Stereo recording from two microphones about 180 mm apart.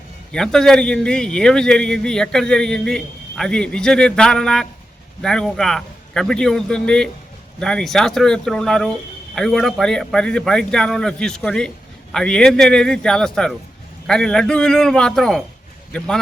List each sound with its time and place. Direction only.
0.3 s a man's voice: 5° left (ahead or behind)